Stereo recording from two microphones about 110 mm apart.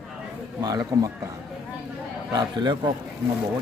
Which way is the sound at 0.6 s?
35° right (ahead or behind).